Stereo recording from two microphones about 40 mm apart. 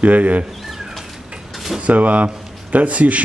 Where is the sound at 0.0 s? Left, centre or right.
Right.